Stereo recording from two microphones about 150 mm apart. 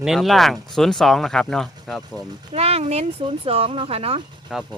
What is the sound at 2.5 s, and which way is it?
Speech, 45° right (ahead or behind).